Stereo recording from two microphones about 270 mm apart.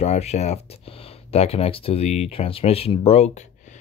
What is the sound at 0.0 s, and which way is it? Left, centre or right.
Speech, left.